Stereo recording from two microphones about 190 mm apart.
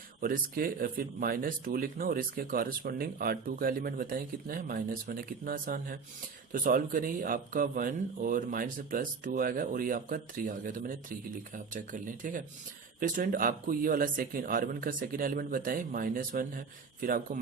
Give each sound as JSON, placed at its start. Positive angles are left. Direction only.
{"t": 0.2, "sound": "speech", "side_deg": -50}